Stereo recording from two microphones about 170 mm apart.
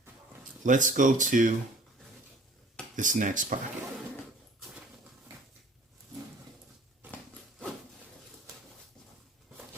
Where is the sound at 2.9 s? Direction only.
50° right (ahead or behind).